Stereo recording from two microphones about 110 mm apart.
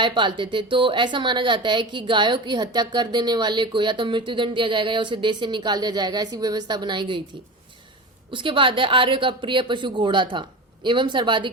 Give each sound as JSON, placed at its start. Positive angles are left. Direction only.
{"t": 0.0, "sound": "a woman's voice", "side_deg": -45}
{"t": 8.3, "sound": "a woman's voice", "side_deg": -50}